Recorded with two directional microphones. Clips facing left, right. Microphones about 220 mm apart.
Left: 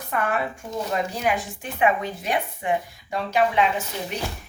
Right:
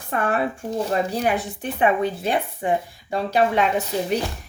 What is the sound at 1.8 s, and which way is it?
Speech, 30° right (ahead or behind).